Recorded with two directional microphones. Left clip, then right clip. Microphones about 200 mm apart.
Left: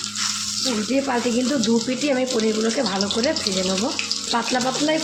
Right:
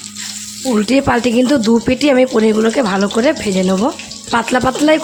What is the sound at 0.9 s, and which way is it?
Speech, 55° right (ahead or behind).